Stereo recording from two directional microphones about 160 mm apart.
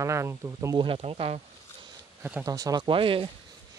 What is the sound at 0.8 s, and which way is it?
Speech, 35° right (ahead or behind).